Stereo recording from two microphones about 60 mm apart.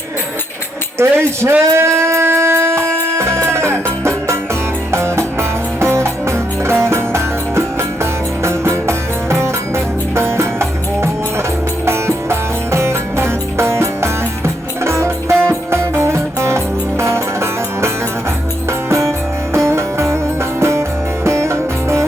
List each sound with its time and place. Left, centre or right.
0.9 s shofar: right
4.9 s music: right